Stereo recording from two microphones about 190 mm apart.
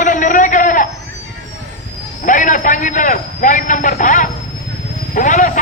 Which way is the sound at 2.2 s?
45° left (ahead or behind).